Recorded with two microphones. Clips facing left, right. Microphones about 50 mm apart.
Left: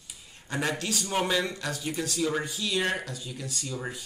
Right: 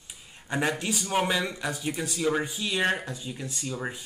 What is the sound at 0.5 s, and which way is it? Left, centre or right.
Speech, centre.